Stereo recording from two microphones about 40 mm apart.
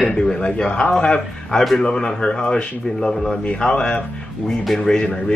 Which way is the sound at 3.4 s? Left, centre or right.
Left.